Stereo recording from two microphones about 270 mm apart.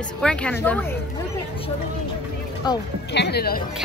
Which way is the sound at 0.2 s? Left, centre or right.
Centre.